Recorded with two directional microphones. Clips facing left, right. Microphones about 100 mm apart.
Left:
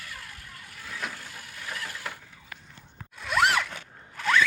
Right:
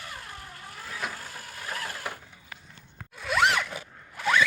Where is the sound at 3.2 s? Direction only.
Centre (ahead or behind).